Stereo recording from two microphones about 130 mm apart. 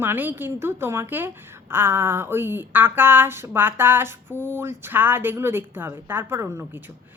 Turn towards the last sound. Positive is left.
turn(degrees=-20)  # may be behind; listen again after turning